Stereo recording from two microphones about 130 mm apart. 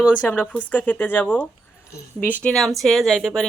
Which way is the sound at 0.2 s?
10° left (ahead or behind).